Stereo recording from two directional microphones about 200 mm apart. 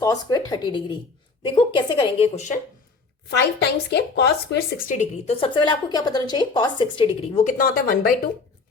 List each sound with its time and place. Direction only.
0.0 s a woman's voice: 15° left (ahead or behind); by 2.6 s 35° left (ahead or behind)
3.2 s a woman's voice: 60° left (ahead or behind)
4.8 s a woman's voice: 40° left (ahead or behind)
7.3 s speech: 40° left (ahead or behind)